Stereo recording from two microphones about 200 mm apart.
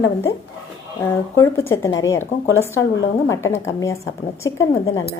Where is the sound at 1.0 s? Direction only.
10° left (ahead or behind).